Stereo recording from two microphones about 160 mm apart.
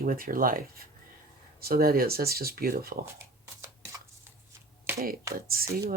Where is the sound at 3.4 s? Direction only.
20° right (ahead or behind).